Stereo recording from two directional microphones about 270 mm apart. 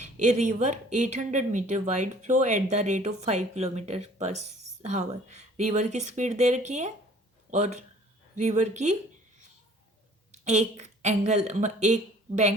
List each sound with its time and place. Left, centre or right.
0.0 s speech: right
10.4 s speech: right